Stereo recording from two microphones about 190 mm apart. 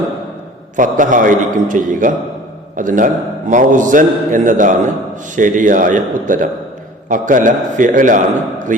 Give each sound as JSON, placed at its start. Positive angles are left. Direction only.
{"t": 0.8, "sound": "a man's voice", "side_deg": -45}